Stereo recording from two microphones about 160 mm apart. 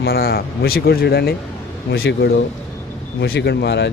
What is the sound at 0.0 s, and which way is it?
Speech, 75° left (ahead or behind).